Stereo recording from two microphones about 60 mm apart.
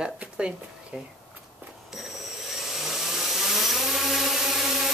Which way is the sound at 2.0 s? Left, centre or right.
Centre.